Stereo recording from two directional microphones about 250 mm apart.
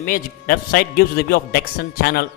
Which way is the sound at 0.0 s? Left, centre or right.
Left.